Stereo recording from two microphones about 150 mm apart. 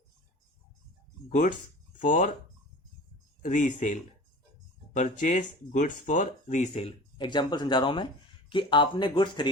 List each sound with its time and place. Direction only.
1.3 s speech: 60° left (ahead or behind)
3.4 s speech: 55° left (ahead or behind)
6.8 s speech: 30° left (ahead or behind)